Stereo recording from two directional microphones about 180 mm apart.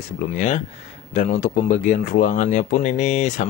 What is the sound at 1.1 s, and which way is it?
Speech, 45° left (ahead or behind).